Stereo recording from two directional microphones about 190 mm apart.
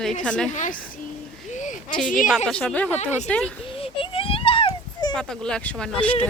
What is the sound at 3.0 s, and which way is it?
Speech, 35° left (ahead or behind).